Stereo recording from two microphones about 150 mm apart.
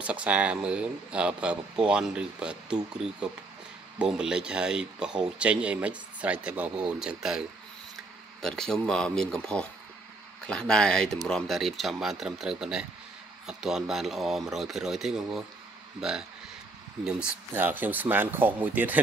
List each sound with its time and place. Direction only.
0.0 s speech: 10° right (ahead or behind)